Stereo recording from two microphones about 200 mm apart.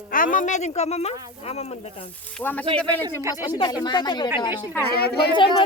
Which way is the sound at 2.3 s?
5° left (ahead or behind).